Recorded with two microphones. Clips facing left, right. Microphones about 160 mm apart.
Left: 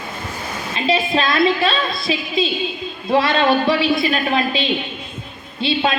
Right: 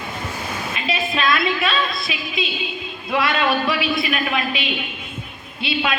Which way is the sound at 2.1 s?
30° left (ahead or behind).